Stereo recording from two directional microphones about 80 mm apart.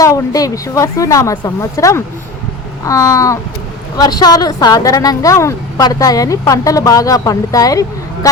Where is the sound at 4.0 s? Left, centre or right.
Left.